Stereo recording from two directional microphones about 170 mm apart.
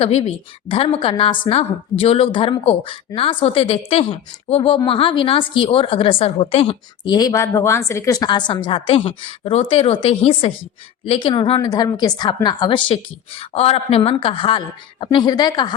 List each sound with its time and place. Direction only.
0.0 s a woman's voice: 35° left (ahead or behind)
7.1 s a woman's voice: 20° left (ahead or behind)